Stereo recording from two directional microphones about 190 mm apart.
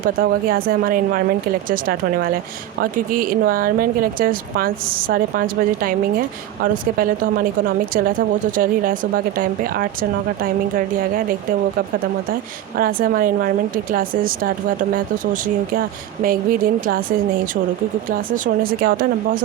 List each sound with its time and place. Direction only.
0.0 s speech: 50° right (ahead or behind)
8.5 s speech: 45° right (ahead or behind)
12.7 s speech: 50° right (ahead or behind)
18.1 s speech: 50° right (ahead or behind)